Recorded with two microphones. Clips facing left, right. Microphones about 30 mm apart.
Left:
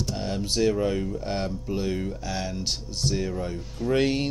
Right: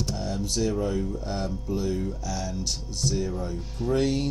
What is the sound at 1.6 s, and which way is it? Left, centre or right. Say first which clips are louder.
Speech: even; left.